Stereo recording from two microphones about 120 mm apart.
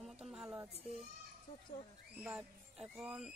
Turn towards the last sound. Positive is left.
turn(degrees=-5)  # may be behind; listen again after turning